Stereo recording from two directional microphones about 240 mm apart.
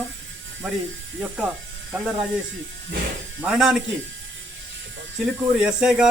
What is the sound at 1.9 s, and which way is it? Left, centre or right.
Speech, centre.